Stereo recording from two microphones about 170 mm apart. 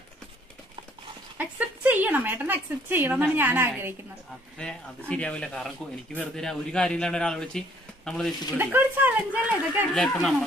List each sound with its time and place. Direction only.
1.4 s a woman's voice: 10° right (ahead or behind)
4.6 s speech: 5° left (ahead or behind)
8.5 s a woman's voice: 10° right (ahead or behind)